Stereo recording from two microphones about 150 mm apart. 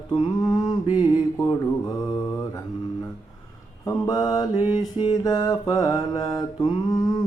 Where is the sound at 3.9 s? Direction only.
25° left (ahead or behind).